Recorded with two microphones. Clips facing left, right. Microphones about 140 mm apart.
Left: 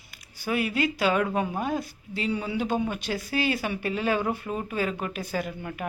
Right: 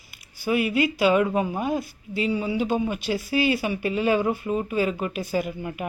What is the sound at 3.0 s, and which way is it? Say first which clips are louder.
Speech: right 4 dB; 50° left (ahead or behind).